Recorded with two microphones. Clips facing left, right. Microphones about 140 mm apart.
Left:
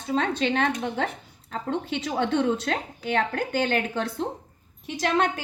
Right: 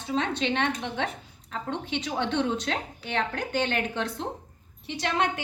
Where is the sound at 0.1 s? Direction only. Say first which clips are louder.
Left 3 dB; 40° left (ahead or behind).